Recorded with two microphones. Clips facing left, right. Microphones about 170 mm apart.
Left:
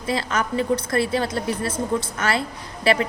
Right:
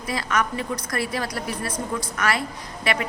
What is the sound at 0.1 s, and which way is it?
A woman's voice, 30° left (ahead or behind).